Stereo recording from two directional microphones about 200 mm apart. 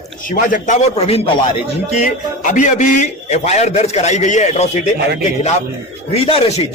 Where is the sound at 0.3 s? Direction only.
40° left (ahead or behind).